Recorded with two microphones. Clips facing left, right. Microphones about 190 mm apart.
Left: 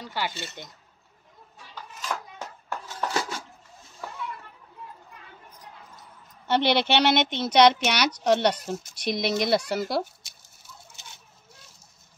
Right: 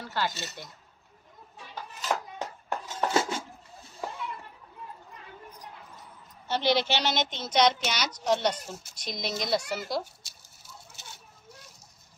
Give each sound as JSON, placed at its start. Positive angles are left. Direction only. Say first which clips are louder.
{"t": 0.0, "sound": "speech", "louder": "even", "side_deg": 15}
{"t": 0.3, "sound": "speech", "louder": "left 2 dB", "side_deg": -40}
{"t": 2.9, "sound": "dishes", "louder": "right 3 dB", "side_deg": -25}
{"t": 6.4, "sound": "a woman's voice", "louder": "left 3 dB", "side_deg": 65}